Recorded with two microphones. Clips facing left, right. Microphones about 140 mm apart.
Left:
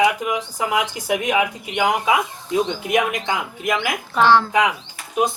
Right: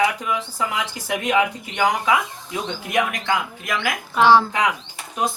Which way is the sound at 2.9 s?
20° left (ahead or behind).